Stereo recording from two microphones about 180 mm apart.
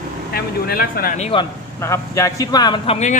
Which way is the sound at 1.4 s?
15° left (ahead or behind).